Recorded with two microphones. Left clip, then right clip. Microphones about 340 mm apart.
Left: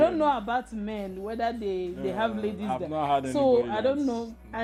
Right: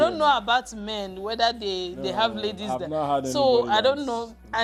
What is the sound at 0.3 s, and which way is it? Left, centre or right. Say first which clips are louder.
Speech: right 5 dB; right.